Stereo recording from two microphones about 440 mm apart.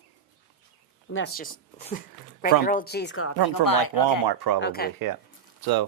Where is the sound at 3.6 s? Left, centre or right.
Left.